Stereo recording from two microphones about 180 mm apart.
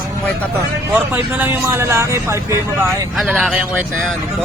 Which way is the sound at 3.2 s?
Centre (ahead or behind).